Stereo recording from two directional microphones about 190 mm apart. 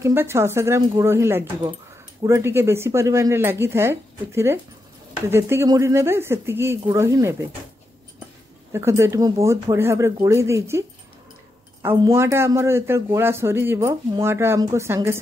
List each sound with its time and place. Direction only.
0.0 s speech: 15° right (ahead or behind)
8.7 s speech: 15° right (ahead or behind)
11.8 s speech: 15° right (ahead or behind)